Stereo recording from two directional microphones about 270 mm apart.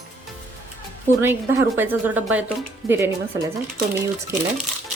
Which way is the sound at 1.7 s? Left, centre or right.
Centre.